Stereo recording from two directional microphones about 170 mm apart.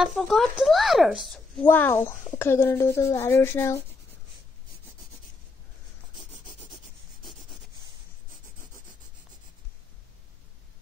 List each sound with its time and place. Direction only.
0.0 s speech: centre (ahead or behind)
1.7 s a woman's voice: 15° left (ahead or behind)